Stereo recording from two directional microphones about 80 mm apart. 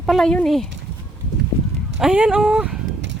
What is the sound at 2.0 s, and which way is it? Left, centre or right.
Speech, centre.